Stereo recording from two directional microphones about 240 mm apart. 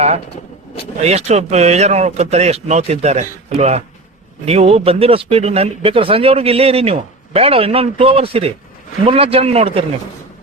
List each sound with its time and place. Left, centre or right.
1.0 s speech: right